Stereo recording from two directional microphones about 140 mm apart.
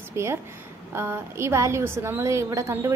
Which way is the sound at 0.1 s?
20° right (ahead or behind).